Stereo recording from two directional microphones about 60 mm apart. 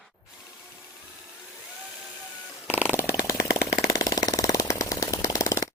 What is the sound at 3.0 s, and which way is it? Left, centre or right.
Chainsaw, left.